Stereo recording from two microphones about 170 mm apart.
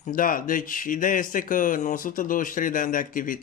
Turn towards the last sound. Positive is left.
turn(degrees=55)  # may be behind; listen again after turning